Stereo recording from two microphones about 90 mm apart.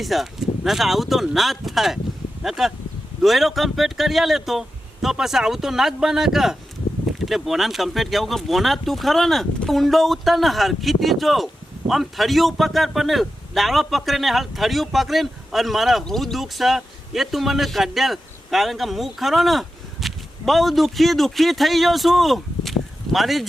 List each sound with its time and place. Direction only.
0.0 s a man's voice: centre (ahead or behind)